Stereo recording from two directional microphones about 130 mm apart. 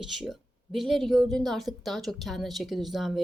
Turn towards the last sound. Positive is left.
turn(degrees=0)  # may be behind; listen again after turning